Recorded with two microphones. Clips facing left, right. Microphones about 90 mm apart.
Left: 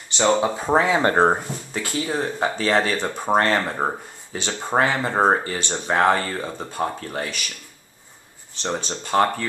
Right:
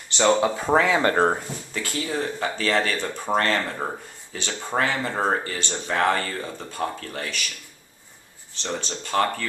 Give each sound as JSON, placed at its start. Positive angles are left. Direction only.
{"t": 0.2, "sound": "speech", "side_deg": 10}
{"t": 0.8, "sound": "speech", "side_deg": 25}
{"t": 4.4, "sound": "speech", "side_deg": 20}
{"t": 8.6, "sound": "speech", "side_deg": 25}